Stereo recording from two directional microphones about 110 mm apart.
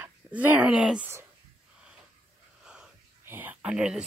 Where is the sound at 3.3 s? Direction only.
15° right (ahead or behind).